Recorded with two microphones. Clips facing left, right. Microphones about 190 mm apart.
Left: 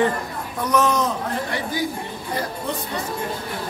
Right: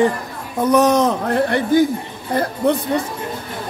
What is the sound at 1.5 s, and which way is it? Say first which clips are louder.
Speech: right 10 dB; 55° right (ahead or behind).